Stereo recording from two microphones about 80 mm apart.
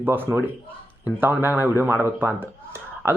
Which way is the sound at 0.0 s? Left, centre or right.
Right.